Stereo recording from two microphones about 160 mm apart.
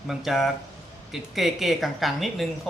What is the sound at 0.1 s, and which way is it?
Speech, centre (ahead or behind).